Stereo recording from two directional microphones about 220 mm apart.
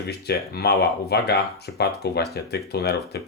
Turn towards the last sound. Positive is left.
turn(degrees=45)  # may be behind; listen again after turning